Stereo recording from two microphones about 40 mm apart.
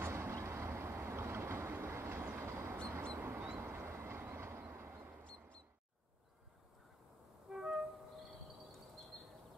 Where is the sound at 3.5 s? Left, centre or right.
Right.